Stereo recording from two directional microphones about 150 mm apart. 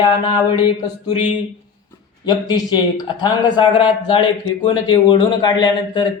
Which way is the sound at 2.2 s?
30° left (ahead or behind).